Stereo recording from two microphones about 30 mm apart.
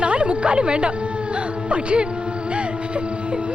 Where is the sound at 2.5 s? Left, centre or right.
Right.